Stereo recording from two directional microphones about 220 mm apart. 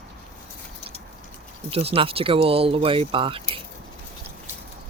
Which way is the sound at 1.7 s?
25° right (ahead or behind).